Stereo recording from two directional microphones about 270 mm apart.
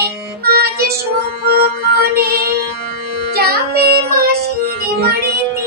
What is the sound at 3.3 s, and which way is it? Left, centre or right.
Music, right.